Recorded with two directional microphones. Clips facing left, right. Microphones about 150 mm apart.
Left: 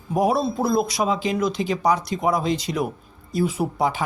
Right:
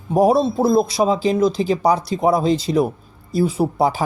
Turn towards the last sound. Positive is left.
turn(degrees=-35)  # may be behind; listen again after turning